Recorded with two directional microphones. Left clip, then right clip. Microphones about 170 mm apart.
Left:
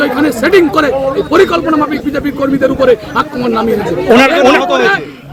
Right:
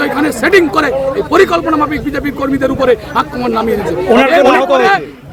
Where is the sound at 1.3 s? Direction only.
20° right (ahead or behind).